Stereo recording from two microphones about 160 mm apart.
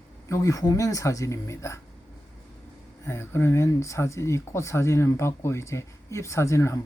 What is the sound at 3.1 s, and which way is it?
Speech, 15° left (ahead or behind).